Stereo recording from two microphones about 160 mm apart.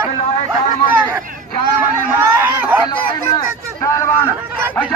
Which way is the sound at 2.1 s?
10° right (ahead or behind).